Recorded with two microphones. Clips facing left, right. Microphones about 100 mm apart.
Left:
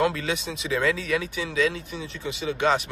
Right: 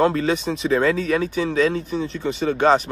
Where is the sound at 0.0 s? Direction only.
40° right (ahead or behind).